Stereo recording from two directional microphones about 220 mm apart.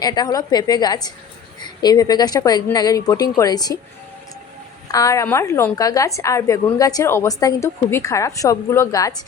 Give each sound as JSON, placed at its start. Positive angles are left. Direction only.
{"t": 0.0, "sound": "a woman's voice", "side_deg": 15}
{"t": 4.9, "sound": "a woman's voice", "side_deg": 15}